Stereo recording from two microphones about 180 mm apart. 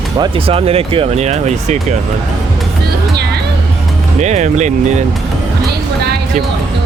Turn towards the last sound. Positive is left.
turn(degrees=-40)  # may be behind; listen again after turning